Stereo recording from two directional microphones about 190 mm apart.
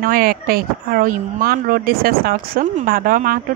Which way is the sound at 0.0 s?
50° right (ahead or behind).